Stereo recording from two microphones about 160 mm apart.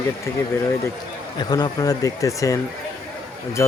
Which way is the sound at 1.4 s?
25° left (ahead or behind).